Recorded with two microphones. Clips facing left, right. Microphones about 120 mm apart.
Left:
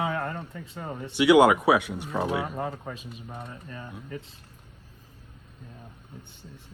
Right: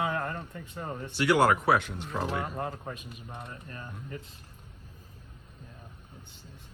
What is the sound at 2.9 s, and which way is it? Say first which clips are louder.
Speech: left 3 dB; 30° left (ahead or behind).